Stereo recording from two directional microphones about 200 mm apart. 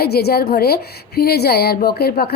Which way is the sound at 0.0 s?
50° left (ahead or behind).